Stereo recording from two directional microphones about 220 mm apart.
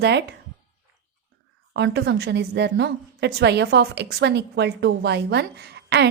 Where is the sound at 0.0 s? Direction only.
50° right (ahead or behind).